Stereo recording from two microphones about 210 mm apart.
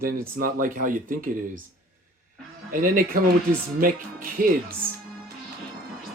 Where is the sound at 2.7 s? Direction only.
40° right (ahead or behind).